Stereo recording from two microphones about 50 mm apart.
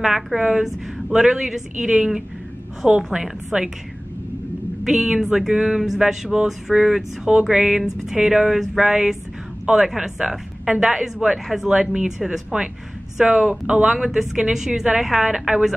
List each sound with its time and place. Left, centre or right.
0.0 s speech: centre
4.8 s speech: centre